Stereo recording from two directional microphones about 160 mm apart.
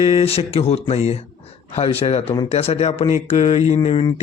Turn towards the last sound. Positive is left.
turn(degrees=35)  # may be behind; listen again after turning